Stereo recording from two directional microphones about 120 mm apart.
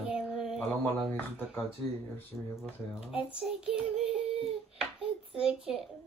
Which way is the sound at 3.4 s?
5° right (ahead or behind).